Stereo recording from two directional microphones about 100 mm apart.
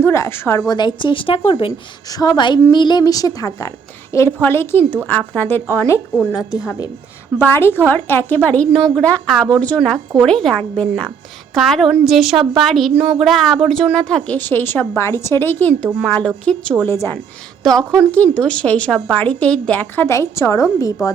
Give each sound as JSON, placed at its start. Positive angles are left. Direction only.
{"t": 0.0, "sound": "a woman's voice", "side_deg": 25}
{"t": 0.7, "sound": "a woman's voice", "side_deg": 50}
{"t": 2.1, "sound": "a woman's voice", "side_deg": 45}
{"t": 3.0, "sound": "a woman's voice", "side_deg": 35}
{"t": 4.4, "sound": "a woman's voice", "side_deg": 25}
{"t": 7.4, "sound": "a woman's voice", "side_deg": 20}
{"t": 11.5, "sound": "a woman's voice", "side_deg": 0}
{"t": 16.8, "sound": "a woman's voice", "side_deg": 25}
{"t": 17.6, "sound": "a woman's voice", "side_deg": 5}